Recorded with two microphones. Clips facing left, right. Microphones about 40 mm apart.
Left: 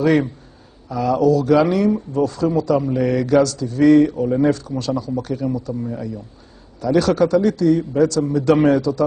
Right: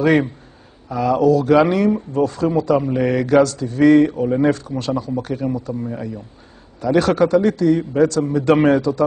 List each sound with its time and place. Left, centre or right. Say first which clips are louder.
0.0 s speech: right 1 dB; right